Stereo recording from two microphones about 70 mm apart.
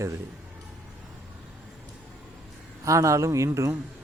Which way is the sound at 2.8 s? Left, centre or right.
Right.